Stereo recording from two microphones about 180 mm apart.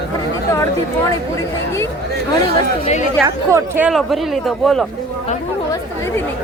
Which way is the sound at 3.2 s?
15° right (ahead or behind).